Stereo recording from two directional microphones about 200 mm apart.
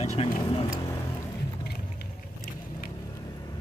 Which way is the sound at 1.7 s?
50° left (ahead or behind).